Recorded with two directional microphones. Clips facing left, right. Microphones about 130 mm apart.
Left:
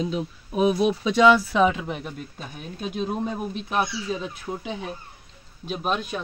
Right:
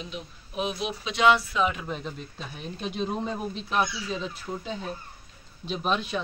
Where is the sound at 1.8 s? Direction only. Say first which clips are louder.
Left 3 dB; 70° left (ahead or behind).